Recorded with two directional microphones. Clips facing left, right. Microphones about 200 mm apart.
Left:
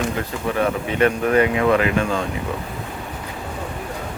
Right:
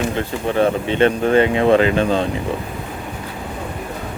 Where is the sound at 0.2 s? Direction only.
30° right (ahead or behind).